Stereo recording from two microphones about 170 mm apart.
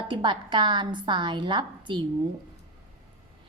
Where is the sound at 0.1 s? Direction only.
30° right (ahead or behind).